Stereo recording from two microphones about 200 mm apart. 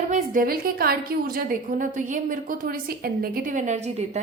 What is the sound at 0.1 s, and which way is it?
A woman's voice, 45° right (ahead or behind).